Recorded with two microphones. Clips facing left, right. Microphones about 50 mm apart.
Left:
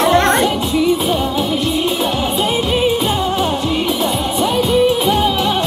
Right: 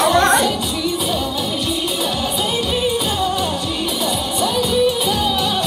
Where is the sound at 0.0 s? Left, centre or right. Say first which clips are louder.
Left 2 dB; left.